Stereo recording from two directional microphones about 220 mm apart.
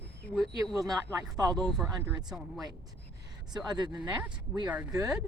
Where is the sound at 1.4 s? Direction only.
15° right (ahead or behind).